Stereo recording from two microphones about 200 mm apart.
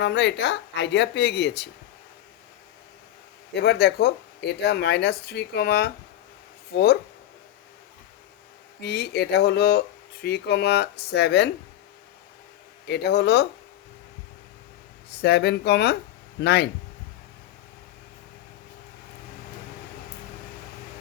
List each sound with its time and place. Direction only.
0.0 s speech: 60° left (ahead or behind)
3.5 s speech: 55° left (ahead or behind)
8.8 s speech: 55° left (ahead or behind)
12.9 s speech: 55° left (ahead or behind)
15.1 s speech: 55° left (ahead or behind)